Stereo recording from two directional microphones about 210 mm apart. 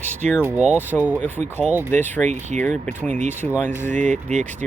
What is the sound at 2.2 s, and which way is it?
Speech, 35° right (ahead or behind).